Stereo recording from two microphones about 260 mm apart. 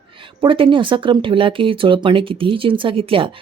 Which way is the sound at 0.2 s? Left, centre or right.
Centre.